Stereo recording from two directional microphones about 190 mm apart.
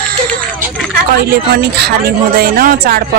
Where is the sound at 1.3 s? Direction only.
55° right (ahead or behind).